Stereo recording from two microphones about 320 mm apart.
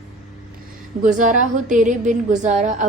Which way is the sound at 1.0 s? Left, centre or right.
Right.